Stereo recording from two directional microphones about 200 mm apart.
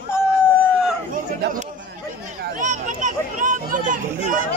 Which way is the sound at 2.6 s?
40° right (ahead or behind).